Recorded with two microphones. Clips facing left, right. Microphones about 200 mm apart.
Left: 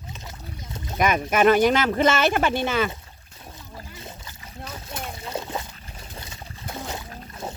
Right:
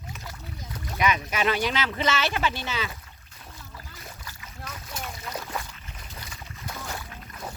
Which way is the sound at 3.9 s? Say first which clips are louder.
Left 4 dB; 25° left (ahead or behind).